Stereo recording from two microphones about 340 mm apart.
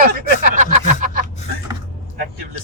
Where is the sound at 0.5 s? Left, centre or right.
Right.